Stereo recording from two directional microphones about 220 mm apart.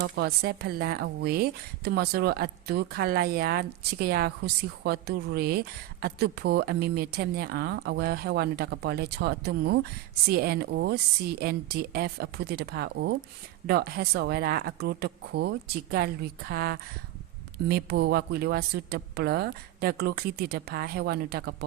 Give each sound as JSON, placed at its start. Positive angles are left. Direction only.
{"t": 0.0, "sound": "speech", "side_deg": -45}